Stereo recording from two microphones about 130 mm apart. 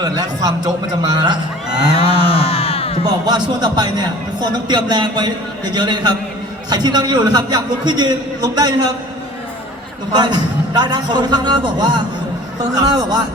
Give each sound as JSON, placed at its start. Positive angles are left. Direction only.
{"t": 0.0, "sound": "a man's voice", "side_deg": -30}
{"t": 2.0, "sound": "a sound", "side_deg": 45}
{"t": 3.0, "sound": "a man's voice", "side_deg": -35}
{"t": 10.1, "sound": "a man's voice", "side_deg": -35}